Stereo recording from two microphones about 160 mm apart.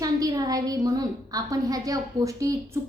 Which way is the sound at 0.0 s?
25° right (ahead or behind).